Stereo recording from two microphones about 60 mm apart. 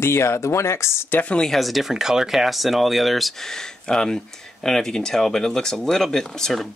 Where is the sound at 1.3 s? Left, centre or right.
Centre.